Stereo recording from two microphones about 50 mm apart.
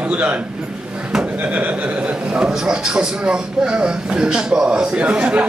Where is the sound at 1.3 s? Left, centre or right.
Right.